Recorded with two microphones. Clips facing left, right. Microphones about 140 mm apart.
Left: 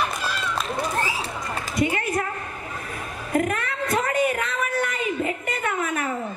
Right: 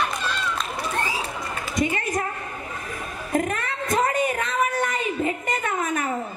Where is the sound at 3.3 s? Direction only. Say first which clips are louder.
Left 1 dB; 30° right (ahead or behind).